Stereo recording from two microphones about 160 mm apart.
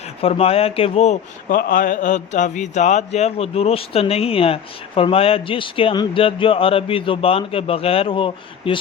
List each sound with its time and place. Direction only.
0.2 s a man's voice: 40° left (ahead or behind)
1.5 s a man's voice: 70° left (ahead or behind); by 8.8 s 30° left (ahead or behind)